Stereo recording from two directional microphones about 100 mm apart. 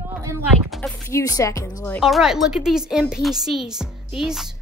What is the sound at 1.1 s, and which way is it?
Speech, 30° left (ahead or behind).